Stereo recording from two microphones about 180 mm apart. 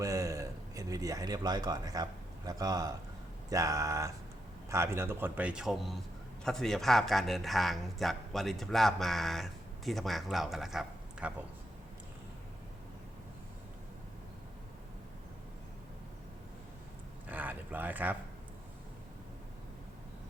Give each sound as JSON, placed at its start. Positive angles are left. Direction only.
{"t": 0.0, "sound": "a man's voice", "side_deg": -20}
{"t": 17.2, "sound": "speech", "side_deg": -10}